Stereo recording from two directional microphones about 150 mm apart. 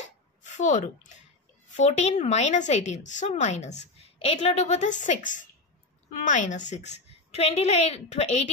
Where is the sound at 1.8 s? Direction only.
45° left (ahead or behind).